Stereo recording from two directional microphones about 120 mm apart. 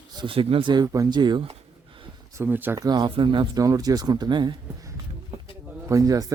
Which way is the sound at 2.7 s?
35° right (ahead or behind).